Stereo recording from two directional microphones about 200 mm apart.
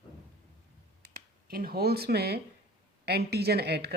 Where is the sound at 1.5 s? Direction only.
50° right (ahead or behind).